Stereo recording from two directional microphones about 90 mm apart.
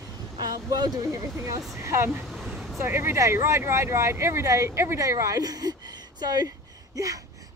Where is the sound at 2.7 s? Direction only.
25° right (ahead or behind).